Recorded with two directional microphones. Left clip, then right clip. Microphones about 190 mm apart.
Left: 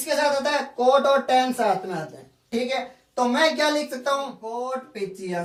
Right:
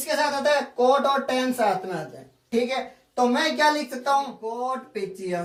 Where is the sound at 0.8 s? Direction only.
Centre (ahead or behind).